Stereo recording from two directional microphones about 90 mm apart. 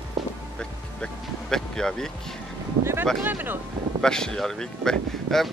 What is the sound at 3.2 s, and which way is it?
Speech, 20° right (ahead or behind).